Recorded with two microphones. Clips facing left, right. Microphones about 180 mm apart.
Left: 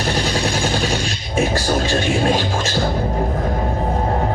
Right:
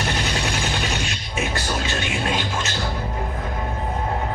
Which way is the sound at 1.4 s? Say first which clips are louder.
Left 8 dB; 40° left (ahead or behind).